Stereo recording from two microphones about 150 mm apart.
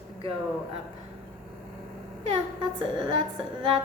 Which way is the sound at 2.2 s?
35° right (ahead or behind).